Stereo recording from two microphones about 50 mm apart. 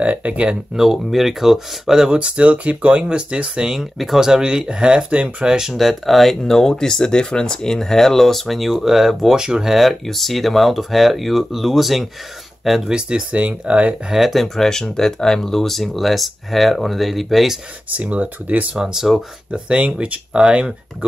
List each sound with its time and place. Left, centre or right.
0.0 s speech: right
0.7 s speech: centre
2.1 s speech: right
3.7 s speech: centre
5.8 s speech: centre
9.8 s speech: centre
12.9 s speech: centre
14.1 s speech: centre
14.4 s speech: centre
18.1 s speech: right
18.8 s speech: centre
19.5 s speech: right